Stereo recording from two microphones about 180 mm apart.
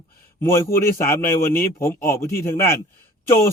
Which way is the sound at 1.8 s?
15° left (ahead or behind).